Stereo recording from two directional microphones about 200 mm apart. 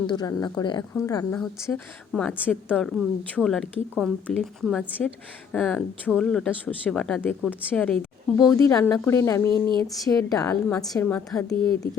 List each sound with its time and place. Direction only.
0.1 s a woman's voice: 20° left (ahead or behind); by 8.5 s centre (ahead or behind)
8.5 s a woman's voice: 15° left (ahead or behind)